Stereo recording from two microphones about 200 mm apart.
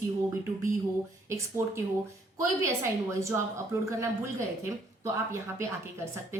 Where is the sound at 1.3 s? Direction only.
15° right (ahead or behind).